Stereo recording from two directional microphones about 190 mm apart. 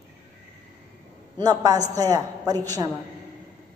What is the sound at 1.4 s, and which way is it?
A man's voice, 20° right (ahead or behind).